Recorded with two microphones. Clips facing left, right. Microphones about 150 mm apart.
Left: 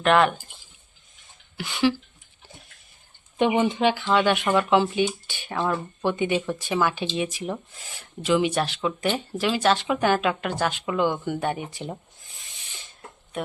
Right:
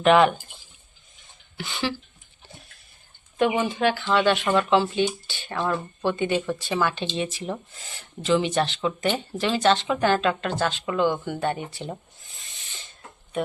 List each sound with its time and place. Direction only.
0.0 s speech: centre (ahead or behind)
1.5 s speech: 5° left (ahead or behind)
3.3 s speech: 20° left (ahead or behind)